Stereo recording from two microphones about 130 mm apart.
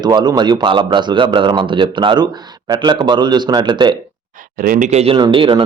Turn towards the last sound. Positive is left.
turn(degrees=-40)  # may be behind; listen again after turning